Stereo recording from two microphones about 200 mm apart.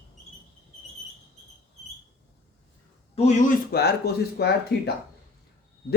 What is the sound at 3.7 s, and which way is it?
Speech, 55° left (ahead or behind).